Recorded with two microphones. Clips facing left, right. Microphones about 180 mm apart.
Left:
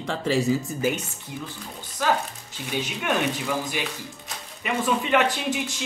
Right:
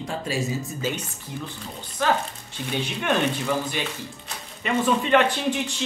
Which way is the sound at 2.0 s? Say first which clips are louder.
Right 1 dB; 10° left (ahead or behind).